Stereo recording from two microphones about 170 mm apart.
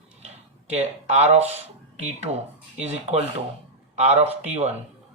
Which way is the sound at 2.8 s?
40° right (ahead or behind).